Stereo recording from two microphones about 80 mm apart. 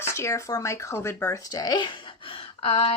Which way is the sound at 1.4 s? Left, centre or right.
Left.